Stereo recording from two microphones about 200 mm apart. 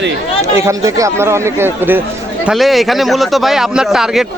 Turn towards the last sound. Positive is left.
turn(degrees=0)  # may be behind; listen again after turning